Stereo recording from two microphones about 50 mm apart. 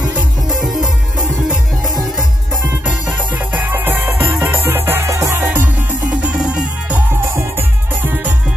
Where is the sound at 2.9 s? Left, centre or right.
Right.